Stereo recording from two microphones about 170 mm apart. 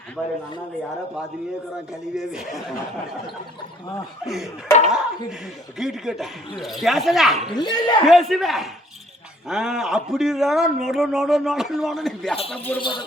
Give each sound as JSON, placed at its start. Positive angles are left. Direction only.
{"t": 1.9, "sound": "a man's voice", "side_deg": 0}
{"t": 4.3, "sound": "a man's voice", "side_deg": 0}
{"t": 7.5, "sound": "speech", "side_deg": 25}
{"t": 8.0, "sound": "a man's voice", "side_deg": 0}
{"t": 12.8, "sound": "speech", "side_deg": 30}